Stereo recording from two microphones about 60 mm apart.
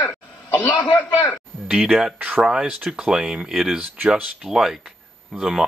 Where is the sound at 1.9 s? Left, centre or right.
Centre.